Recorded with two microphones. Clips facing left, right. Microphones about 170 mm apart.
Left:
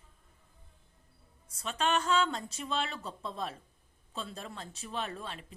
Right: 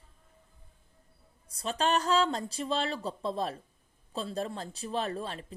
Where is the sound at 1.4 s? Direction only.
35° right (ahead or behind).